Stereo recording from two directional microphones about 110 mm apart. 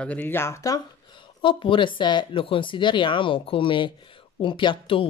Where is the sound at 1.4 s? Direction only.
50° left (ahead or behind).